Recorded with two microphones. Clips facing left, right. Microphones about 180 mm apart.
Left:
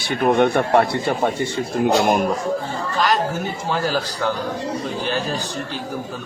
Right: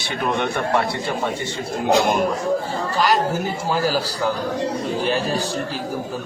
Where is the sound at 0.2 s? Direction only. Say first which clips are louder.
Left 6 dB; 50° left (ahead or behind).